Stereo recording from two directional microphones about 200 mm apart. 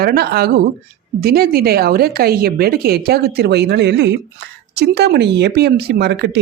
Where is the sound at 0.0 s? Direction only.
50° right (ahead or behind).